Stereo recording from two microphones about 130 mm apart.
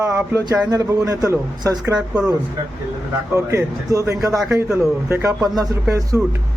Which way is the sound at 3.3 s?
25° right (ahead or behind).